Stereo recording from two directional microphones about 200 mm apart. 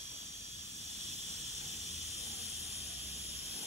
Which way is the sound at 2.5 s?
35° right (ahead or behind).